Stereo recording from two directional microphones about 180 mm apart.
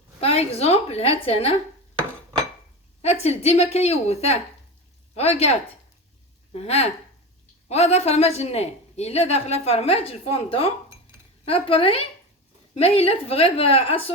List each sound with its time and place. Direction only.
0.2 s a woman's voice: 35° left (ahead or behind)
3.0 s a woman's voice: 35° left (ahead or behind)